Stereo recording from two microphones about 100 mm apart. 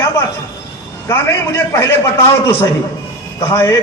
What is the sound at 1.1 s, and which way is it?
A man's voice, 25° left (ahead or behind).